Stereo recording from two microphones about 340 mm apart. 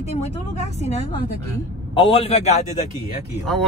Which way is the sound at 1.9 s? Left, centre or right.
Centre.